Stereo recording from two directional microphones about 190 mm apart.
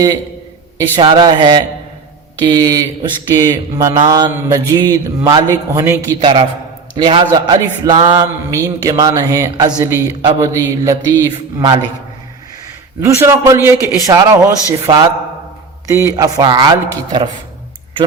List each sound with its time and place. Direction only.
0.8 s speech: 20° right (ahead or behind)
6.1 s speech: 25° right (ahead or behind)
13.0 s a man's voice: 15° right (ahead or behind)